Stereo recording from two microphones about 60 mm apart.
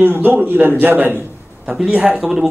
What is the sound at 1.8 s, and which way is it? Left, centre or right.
Speech, centre.